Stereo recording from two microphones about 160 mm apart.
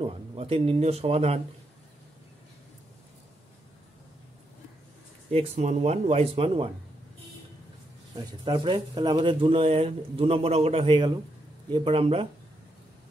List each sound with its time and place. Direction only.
0.0 s speech: 35° right (ahead or behind)
5.3 s speech: 40° right (ahead or behind)
8.3 s speech: 30° right (ahead or behind)